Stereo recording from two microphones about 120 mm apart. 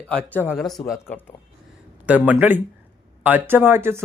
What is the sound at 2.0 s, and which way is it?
Speech, 10° right (ahead or behind).